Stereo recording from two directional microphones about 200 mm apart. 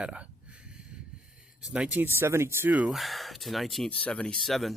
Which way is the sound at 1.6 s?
5° right (ahead or behind).